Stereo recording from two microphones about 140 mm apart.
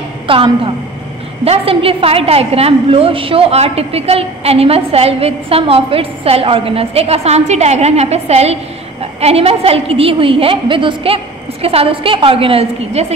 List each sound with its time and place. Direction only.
0.3 s a woman's voice: 40° right (ahead or behind)